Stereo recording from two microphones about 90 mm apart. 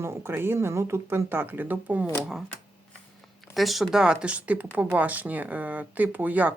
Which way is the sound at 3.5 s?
Centre (ahead or behind).